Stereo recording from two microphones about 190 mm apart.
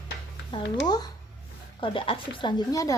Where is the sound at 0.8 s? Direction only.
20° left (ahead or behind).